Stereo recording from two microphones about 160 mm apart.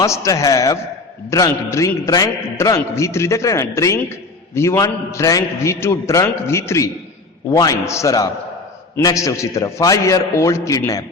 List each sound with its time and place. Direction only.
0.0 s a man's voice: 20° left (ahead or behind)